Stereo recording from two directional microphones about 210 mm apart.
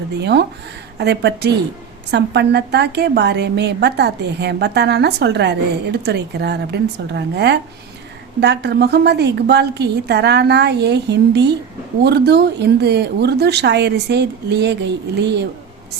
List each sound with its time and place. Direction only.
0.2 s a woman's voice: 55° right (ahead or behind)